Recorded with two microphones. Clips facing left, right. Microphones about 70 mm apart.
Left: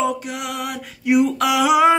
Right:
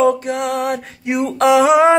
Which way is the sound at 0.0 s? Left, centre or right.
Right.